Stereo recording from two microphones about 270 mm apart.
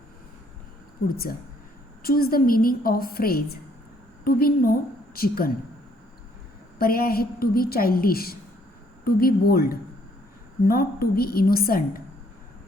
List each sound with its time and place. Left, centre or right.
1.0 s a woman's voice: left
6.7 s a woman's voice: left